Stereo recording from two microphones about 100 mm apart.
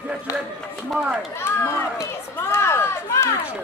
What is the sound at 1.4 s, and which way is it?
Run, 25° left (ahead or behind).